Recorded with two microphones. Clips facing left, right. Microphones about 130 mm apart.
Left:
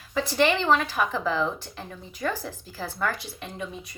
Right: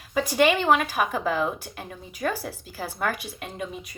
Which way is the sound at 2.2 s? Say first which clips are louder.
Right 1 dB; 45° right (ahead or behind).